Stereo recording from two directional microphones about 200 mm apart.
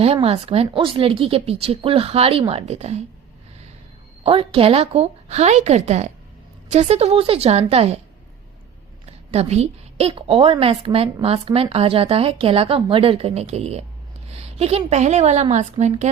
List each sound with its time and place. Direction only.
0.0 s a woman's voice: 30° right (ahead or behind)
4.2 s a woman's voice: 30° right (ahead or behind)
9.0 s a woman's voice: 30° right (ahead or behind)